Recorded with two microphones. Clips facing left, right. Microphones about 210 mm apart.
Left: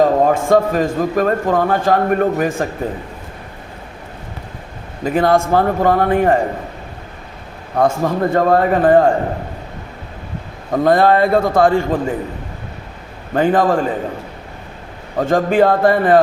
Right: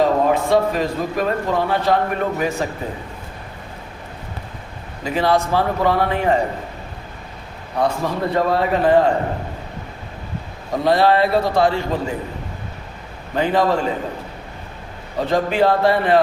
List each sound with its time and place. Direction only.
0.0 s a man's voice: 45° left (ahead or behind)
5.0 s a man's voice: 50° left (ahead or behind)
7.8 s a man's voice: 50° left (ahead or behind)
10.7 s a man's voice: 50° left (ahead or behind)
13.3 s a man's voice: 50° left (ahead or behind)
15.2 s a man's voice: 50° left (ahead or behind)